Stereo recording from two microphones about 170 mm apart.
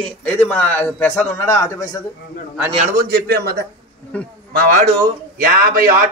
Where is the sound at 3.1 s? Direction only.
65° right (ahead or behind).